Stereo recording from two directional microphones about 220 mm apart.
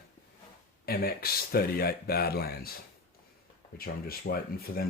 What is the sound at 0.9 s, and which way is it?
Speech, 45° left (ahead or behind).